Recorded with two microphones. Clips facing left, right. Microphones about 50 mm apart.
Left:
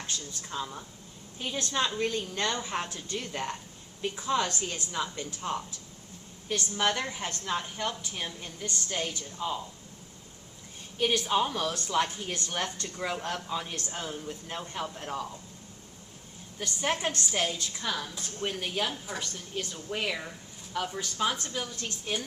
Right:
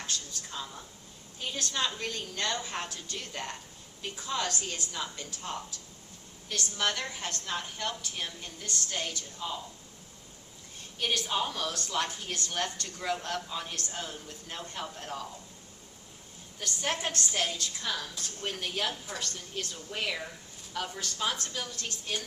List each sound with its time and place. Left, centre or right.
0.1 s a woman's voice: centre
11.3 s a woman's voice: centre
16.6 s a woman's voice: centre